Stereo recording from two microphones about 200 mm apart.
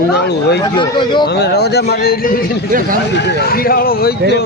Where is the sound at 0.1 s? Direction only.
55° left (ahead or behind).